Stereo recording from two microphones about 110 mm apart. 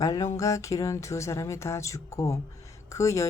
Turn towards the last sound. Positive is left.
turn(degrees=25)  # may be behind; listen again after turning